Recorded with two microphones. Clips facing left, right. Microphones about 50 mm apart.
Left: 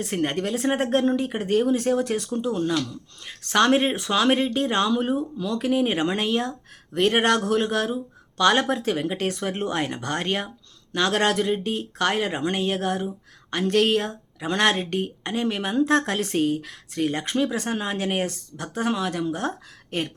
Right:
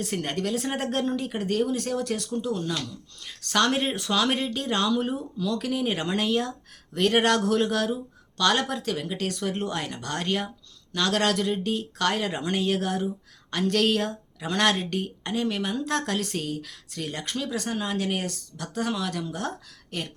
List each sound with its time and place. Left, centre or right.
0.0 s speech: left
8.8 s speech: left; by 19.5 s centre
19.9 s speech: left